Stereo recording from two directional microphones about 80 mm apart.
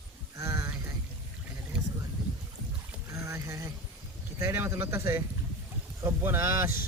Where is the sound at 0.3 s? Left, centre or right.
Right.